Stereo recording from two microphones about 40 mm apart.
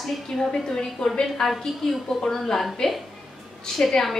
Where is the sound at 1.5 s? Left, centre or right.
Centre.